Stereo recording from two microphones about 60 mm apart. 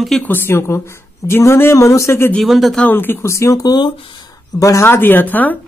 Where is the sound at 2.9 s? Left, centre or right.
Left.